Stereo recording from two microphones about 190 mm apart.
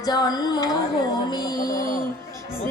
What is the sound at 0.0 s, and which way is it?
Music, 20° left (ahead or behind).